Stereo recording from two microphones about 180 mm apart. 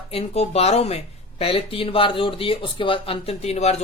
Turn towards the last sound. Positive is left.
turn(degrees=35)  # may be behind; listen again after turning